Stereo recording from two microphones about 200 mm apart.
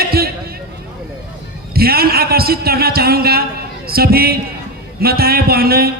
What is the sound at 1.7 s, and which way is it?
A man's voice, 50° right (ahead or behind).